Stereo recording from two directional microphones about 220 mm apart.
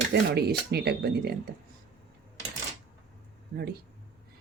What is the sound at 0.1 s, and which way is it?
Speech, 45° right (ahead or behind).